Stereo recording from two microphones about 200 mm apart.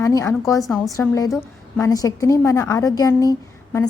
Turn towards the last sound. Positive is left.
turn(degrees=15)  # may be behind; listen again after turning